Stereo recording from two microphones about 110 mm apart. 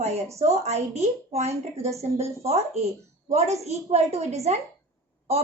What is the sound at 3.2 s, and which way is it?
A woman's voice, 90° right.